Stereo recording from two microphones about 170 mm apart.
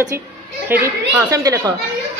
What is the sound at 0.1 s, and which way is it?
A woman's voice, 15° right (ahead or behind).